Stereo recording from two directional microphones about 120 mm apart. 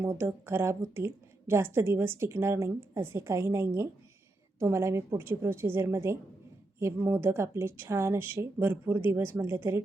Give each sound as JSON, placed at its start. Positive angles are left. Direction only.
{"t": 0.0, "sound": "a woman's voice", "side_deg": -20}